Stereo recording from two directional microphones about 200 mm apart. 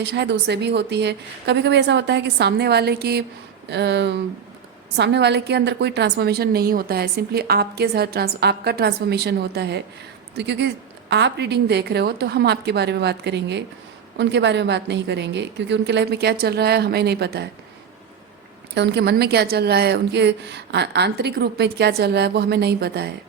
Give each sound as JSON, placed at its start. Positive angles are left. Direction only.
{"t": 0.0, "sound": "a woman's voice", "side_deg": -60}
{"t": 18.7, "sound": "a woman's voice", "side_deg": -60}